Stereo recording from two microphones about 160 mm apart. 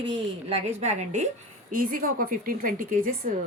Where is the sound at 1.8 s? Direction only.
60° right (ahead or behind).